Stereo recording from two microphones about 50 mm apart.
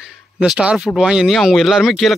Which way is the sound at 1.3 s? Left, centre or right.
Centre.